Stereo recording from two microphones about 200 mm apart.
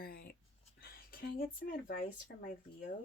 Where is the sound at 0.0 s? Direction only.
50° left (ahead or behind).